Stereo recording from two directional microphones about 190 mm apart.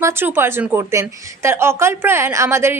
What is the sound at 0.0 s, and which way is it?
Speech, 10° right (ahead or behind).